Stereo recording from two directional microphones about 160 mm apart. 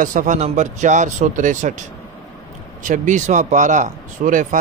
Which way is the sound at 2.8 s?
50° right (ahead or behind).